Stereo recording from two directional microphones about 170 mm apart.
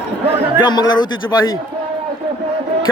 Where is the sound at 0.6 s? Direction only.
25° left (ahead or behind).